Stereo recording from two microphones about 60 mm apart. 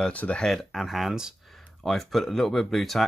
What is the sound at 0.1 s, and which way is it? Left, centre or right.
Speech, left.